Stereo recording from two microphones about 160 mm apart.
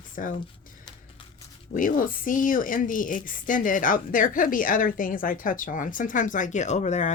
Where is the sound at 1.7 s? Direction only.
55° left (ahead or behind).